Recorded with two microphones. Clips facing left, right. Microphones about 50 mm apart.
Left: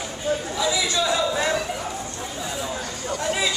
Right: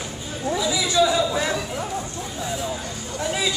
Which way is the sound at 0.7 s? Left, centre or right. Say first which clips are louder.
Right 5 dB; centre.